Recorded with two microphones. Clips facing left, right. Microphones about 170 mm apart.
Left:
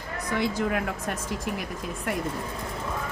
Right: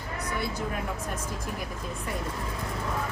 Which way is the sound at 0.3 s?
90° left.